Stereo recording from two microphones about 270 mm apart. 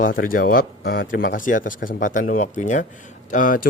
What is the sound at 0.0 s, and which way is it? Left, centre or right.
A man's voice, left.